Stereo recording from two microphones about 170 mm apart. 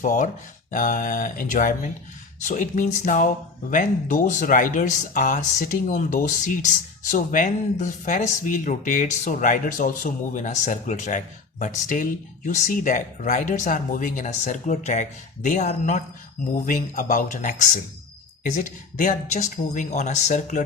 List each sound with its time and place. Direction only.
0.0 s speech: 50° left (ahead or behind)